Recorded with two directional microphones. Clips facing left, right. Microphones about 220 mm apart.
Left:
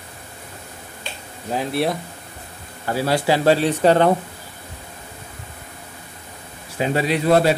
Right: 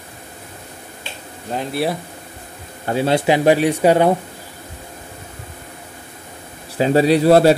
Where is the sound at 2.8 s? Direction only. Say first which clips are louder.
Right 3 dB; 25° right (ahead or behind).